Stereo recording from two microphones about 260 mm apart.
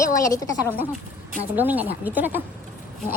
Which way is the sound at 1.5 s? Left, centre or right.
Centre.